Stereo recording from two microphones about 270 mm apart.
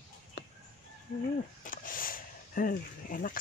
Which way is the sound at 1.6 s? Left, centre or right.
Left.